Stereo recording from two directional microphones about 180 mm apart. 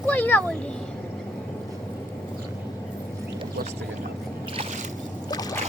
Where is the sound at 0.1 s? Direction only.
10° left (ahead or behind).